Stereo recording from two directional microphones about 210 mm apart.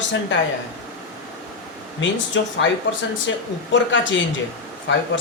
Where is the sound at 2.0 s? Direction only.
60° left (ahead or behind).